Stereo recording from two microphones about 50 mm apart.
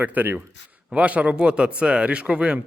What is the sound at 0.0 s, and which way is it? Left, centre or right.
A man's voice, right.